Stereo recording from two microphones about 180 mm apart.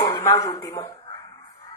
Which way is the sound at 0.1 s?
20° left (ahead or behind).